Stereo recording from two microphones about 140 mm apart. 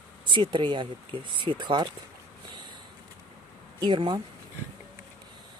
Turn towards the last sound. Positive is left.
turn(degrees=-35)  # may be behind; listen again after turning